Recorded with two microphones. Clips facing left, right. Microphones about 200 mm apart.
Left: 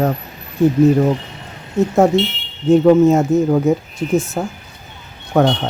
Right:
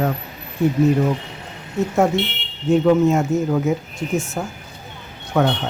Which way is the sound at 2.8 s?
35° left (ahead or behind).